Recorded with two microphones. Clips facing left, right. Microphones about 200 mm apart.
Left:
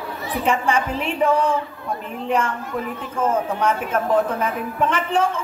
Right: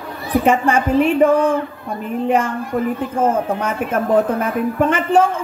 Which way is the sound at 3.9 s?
50° right (ahead or behind).